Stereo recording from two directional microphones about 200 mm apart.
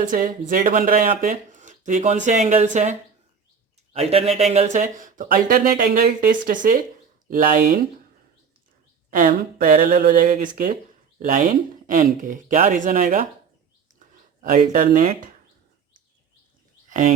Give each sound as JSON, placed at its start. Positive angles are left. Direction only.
{"t": 0.0, "sound": "speech", "side_deg": -40}
{"t": 9.0, "sound": "speech", "side_deg": -45}
{"t": 10.2, "sound": "speech", "side_deg": -40}
{"t": 14.4, "sound": "speech", "side_deg": -45}
{"t": 16.9, "sound": "speech", "side_deg": -40}